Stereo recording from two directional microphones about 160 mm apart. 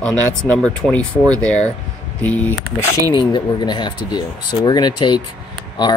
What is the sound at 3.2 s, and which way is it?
Speech, 30° left (ahead or behind).